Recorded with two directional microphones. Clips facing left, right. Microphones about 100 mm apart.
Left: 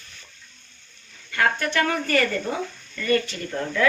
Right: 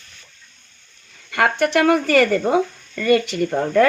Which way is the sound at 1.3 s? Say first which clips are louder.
Right 5 dB; 75° right (ahead or behind).